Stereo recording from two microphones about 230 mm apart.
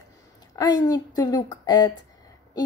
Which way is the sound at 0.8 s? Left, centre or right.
Centre.